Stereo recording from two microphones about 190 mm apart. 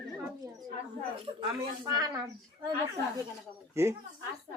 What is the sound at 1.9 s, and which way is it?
Speech, 20° right (ahead or behind).